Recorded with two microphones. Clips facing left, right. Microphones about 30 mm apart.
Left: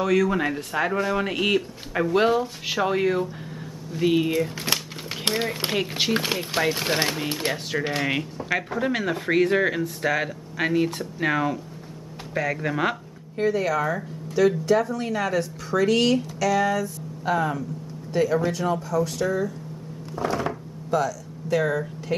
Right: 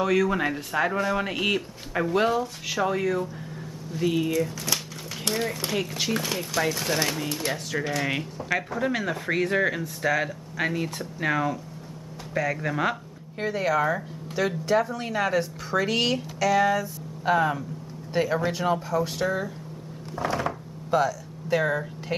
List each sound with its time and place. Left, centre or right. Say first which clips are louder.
0.0 s speech: left 1 dB; centre; by 5.8 s left
5.8 s speech: left 4 dB; left
8.0 s speech: left 2 dB; centre
13.4 s speech: left 2 dB; centre
20.2 s a sound: left 1 dB; centre
20.9 s speech: right 1 dB; centre